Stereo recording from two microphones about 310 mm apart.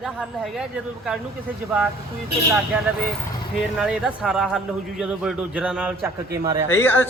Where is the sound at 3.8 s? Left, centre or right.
Centre.